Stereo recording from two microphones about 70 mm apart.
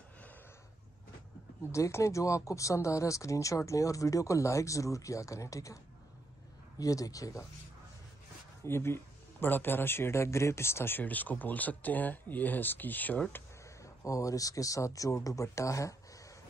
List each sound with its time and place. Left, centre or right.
1.7 s speech: left
6.8 s speech: left
8.6 s speech: left
14.0 s speech: left